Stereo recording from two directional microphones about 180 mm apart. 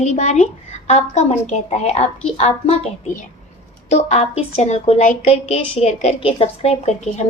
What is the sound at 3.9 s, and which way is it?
A woman's voice, 40° left (ahead or behind).